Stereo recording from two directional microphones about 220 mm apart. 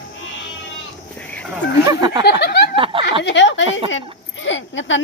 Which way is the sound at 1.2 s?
5° left (ahead or behind).